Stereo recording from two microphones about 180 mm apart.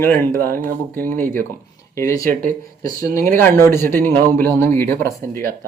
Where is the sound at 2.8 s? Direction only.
20° left (ahead or behind).